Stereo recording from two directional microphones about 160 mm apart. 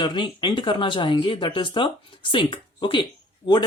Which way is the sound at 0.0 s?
30° left (ahead or behind).